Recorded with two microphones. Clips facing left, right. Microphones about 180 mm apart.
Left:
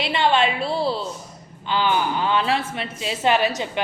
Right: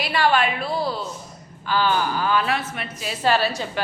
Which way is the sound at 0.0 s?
25° left (ahead or behind).